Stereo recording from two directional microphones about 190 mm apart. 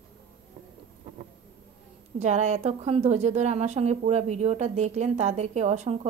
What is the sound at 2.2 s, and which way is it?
A woman's voice, 35° right (ahead or behind).